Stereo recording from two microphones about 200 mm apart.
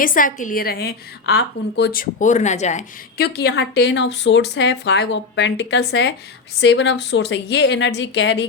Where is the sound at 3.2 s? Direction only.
55° left (ahead or behind).